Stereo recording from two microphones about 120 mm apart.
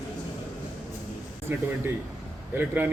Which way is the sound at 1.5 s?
15° right (ahead or behind).